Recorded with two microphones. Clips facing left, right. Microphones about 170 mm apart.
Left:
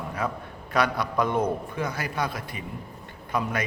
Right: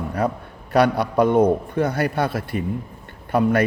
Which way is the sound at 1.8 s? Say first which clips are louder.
Right 8 dB; 60° right (ahead or behind).